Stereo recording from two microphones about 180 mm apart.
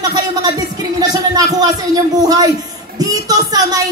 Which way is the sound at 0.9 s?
20° right (ahead or behind).